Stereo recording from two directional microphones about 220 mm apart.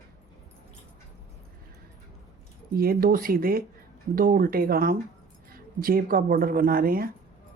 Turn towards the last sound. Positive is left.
turn(degrees=-40)  # may be behind; listen again after turning